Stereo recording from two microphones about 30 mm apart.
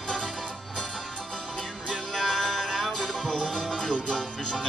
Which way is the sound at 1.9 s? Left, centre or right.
Centre.